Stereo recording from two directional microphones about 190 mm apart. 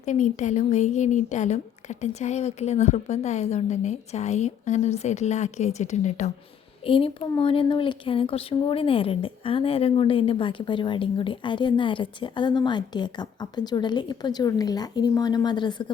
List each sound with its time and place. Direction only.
0.0 s speech: 40° left (ahead or behind); by 15.9 s 25° left (ahead or behind)